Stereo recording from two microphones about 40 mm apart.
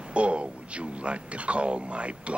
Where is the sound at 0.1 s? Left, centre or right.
Right.